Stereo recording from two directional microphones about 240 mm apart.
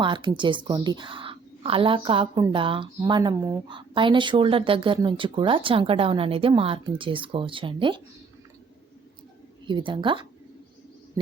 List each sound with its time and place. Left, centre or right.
0.0 s speech: centre
9.6 s speech: centre